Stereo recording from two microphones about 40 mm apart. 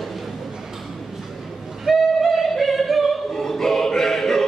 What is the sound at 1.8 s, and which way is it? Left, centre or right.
Music, centre.